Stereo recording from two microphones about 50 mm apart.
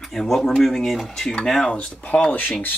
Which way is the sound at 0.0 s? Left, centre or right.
Centre.